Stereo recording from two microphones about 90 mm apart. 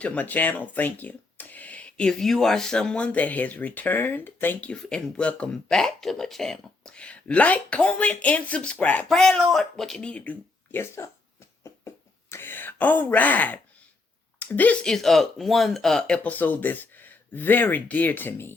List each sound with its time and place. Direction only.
0.0 s speech: 15° left (ahead or behind)
9.0 s speech: 5° left (ahead or behind)
10.8 s speech: 30° left (ahead or behind)
11.6 s wail: 30° left (ahead or behind)
14.3 s a woman's voice: 20° left (ahead or behind)
14.8 s speech: 5° left (ahead or behind); by 18.5 s 25° left (ahead or behind)